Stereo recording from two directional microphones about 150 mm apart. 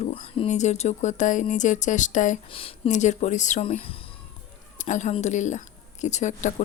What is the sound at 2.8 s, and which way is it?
Speech, 50° left (ahead or behind).